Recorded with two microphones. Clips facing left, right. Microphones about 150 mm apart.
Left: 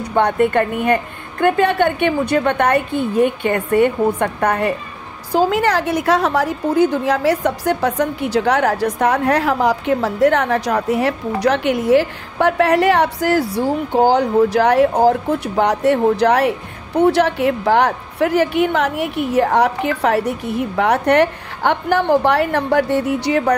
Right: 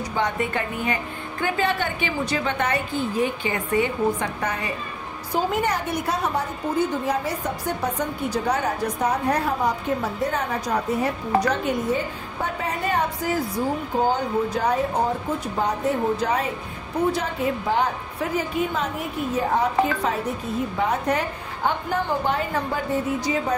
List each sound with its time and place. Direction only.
0.1 s a woman's voice: 60° left (ahead or behind)
5.3 s a woman's voice: 90° left; by 23.5 s 75° left (ahead or behind)